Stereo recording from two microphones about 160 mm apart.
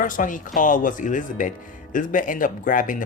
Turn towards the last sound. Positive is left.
turn(degrees=55)  # may be behind; listen again after turning